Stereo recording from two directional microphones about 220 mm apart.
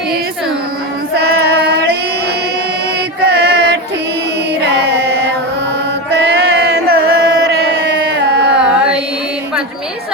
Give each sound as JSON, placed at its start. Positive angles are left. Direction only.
{"t": 1.1, "sound": "chant", "side_deg": -45}
{"t": 3.2, "sound": "mantra", "side_deg": -50}
{"t": 6.1, "sound": "chant", "side_deg": -50}